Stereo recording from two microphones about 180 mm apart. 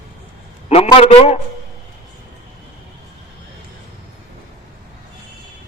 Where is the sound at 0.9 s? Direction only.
35° left (ahead or behind).